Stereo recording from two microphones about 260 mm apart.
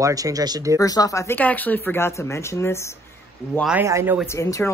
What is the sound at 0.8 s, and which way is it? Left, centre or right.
Speech, centre.